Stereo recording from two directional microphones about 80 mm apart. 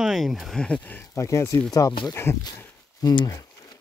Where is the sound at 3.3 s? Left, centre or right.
Left.